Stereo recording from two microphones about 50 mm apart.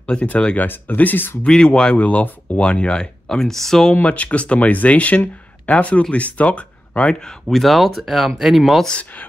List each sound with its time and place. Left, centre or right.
0.0 s speech: left
0.6 s speech: left
1.4 s speech: centre
2.0 s speech: left; by 3.9 s centre
3.9 s speech: left
7.4 s speech: centre